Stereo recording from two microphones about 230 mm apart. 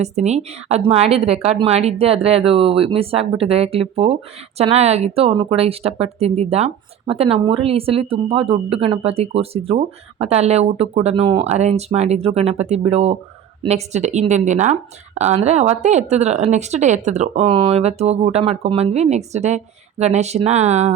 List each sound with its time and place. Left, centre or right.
0.0 s speech: right